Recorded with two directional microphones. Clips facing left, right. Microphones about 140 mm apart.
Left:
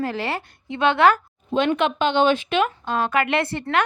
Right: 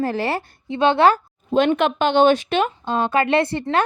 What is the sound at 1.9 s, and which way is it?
A woman's voice, 45° right (ahead or behind).